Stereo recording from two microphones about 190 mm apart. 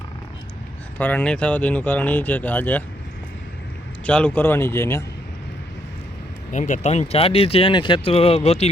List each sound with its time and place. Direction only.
0.9 s speech: 10° left (ahead or behind)
4.0 s speech: 5° left (ahead or behind)
6.5 s speech: 40° left (ahead or behind)